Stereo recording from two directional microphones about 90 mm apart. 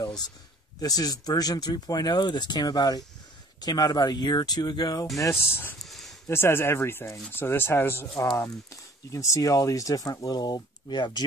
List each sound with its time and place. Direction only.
0.7 s speech: 45° left (ahead or behind)
5.3 s speech: 25° left (ahead or behind)
5.8 s a sound: centre (ahead or behind)
6.2 s speech: 25° left (ahead or behind); by 11.2 s 55° left (ahead or behind)